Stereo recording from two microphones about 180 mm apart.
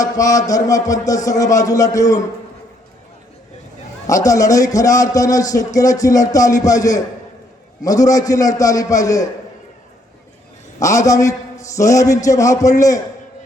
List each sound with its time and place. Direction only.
0.0 s a man's voice: 20° left (ahead or behind)
4.0 s a man's voice: 20° left (ahead or behind)
10.8 s a man's voice: 20° left (ahead or behind)